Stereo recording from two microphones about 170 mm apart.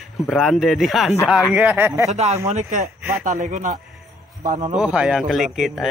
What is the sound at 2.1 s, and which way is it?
Speech, 40° right (ahead or behind).